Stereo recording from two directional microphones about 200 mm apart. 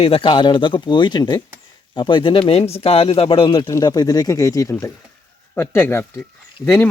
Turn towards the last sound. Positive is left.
turn(degrees=15)  # may be behind; listen again after turning